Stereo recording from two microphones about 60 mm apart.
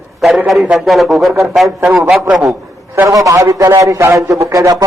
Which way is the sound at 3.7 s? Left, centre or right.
Right.